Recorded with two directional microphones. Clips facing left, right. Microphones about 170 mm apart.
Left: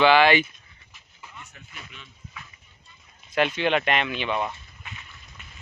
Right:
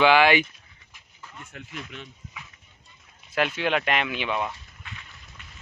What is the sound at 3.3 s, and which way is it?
Speech, 5° right (ahead or behind).